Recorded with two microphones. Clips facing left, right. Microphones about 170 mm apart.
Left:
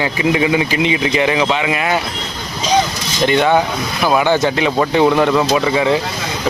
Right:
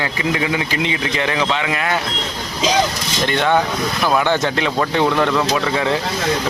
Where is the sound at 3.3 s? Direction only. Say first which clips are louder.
Left 3 dB; 10° left (ahead or behind).